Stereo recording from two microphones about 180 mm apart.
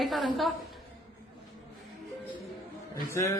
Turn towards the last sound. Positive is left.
turn(degrees=15)  # may be behind; listen again after turning